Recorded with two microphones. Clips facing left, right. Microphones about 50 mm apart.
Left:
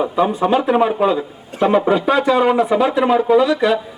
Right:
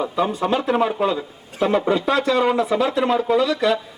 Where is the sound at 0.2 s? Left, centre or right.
Centre.